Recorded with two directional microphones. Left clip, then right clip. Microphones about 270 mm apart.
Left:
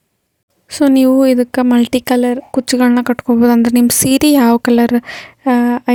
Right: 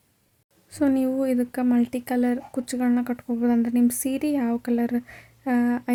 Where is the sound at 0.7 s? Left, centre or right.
Left.